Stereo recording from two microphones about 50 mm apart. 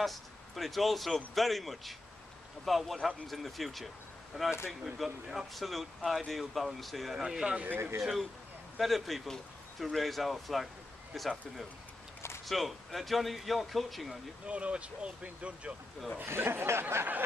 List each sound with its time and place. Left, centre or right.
0.0 s speech: centre
4.3 s speech: centre
4.9 s speech: centre
7.2 s speech: centre
7.6 s speech: right
8.0 s speech: centre
14.4 s speech: right
16.3 s speech: right